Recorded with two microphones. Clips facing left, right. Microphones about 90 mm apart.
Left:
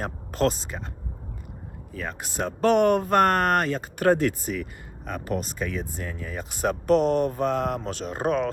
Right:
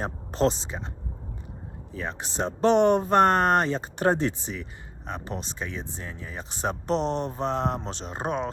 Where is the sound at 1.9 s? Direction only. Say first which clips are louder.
Even; 30° right (ahead or behind).